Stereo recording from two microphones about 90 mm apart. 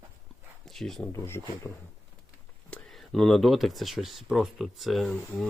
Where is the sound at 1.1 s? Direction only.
30° left (ahead or behind).